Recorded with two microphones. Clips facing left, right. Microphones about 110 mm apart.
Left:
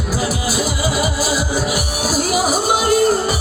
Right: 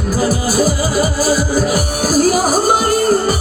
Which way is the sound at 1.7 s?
35° right (ahead or behind).